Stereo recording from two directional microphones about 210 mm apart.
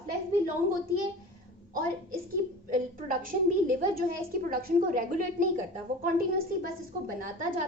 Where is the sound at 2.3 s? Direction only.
40° right (ahead or behind).